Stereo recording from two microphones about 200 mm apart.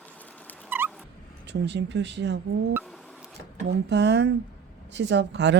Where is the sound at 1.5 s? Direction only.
60° right (ahead or behind).